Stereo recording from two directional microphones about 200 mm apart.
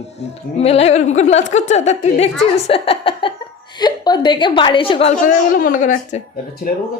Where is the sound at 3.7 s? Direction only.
20° left (ahead or behind).